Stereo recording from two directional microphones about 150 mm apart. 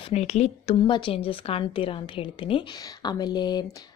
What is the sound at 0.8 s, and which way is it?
A woman's voice, 35° left (ahead or behind).